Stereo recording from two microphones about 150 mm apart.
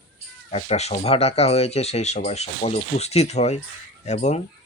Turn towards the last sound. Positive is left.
turn(degrees=50)  # may be behind; listen again after turning